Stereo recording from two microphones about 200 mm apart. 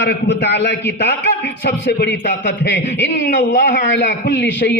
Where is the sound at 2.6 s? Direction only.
60° left (ahead or behind).